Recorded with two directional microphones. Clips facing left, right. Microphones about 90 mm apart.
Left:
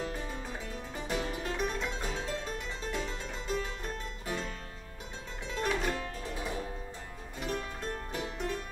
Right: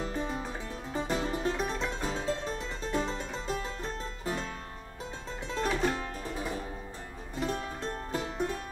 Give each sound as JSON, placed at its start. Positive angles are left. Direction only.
{"t": 0.2, "sound": "music", "side_deg": -30}
{"t": 5.5, "sound": "music", "side_deg": -35}
{"t": 7.3, "sound": "music", "side_deg": -30}